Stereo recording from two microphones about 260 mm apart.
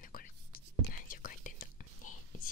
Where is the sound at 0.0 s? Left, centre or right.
Left.